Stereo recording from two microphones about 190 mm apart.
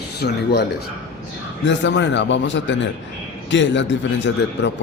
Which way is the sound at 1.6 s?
70° left (ahead or behind).